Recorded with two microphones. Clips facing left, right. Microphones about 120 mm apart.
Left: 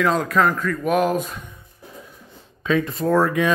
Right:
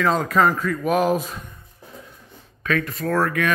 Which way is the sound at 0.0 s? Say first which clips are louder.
Even; centre (ahead or behind).